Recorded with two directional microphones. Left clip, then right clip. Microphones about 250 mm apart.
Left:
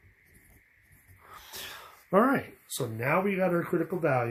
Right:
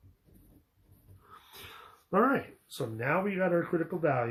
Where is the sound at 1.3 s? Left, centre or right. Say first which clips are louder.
Left 7 dB; left.